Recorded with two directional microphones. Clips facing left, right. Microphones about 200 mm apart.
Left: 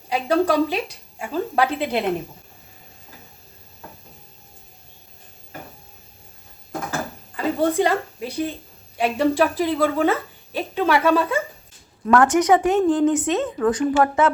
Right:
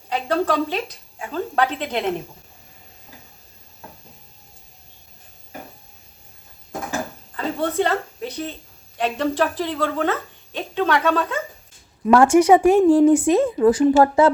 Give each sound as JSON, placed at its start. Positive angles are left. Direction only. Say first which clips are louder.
{"t": 0.1, "sound": "speech", "louder": "left 2 dB", "side_deg": 10}
{"t": 7.3, "sound": "a woman's voice", "louder": "left 2 dB", "side_deg": 10}
{"t": 12.2, "sound": "speech", "louder": "right 5 dB", "side_deg": -30}
{"t": 12.8, "sound": "a woman's voice", "louder": "right 5 dB", "side_deg": -10}
{"t": 13.1, "sound": "speech", "louder": "right 5 dB", "side_deg": -30}